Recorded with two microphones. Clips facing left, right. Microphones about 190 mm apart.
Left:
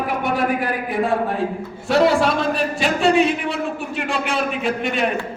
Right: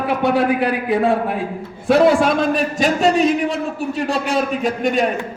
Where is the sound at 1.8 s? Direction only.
50° right (ahead or behind).